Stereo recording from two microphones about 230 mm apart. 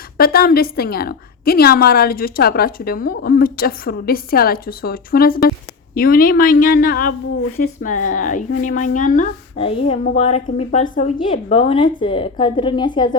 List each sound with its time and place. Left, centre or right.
0.2 s a woman's voice: left; by 13.1 s centre